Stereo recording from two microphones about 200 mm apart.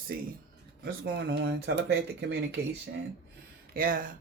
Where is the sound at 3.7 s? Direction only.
45° right (ahead or behind).